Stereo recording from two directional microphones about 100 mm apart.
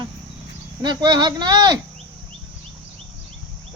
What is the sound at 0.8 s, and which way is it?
Speech, 45° right (ahead or behind).